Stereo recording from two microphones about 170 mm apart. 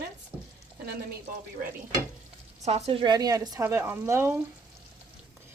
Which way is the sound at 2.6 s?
40° right (ahead or behind).